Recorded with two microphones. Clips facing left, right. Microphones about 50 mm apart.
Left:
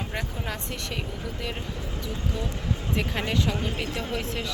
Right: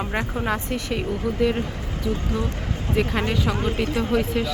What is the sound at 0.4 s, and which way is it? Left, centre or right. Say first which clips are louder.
Speech: right 8 dB; centre.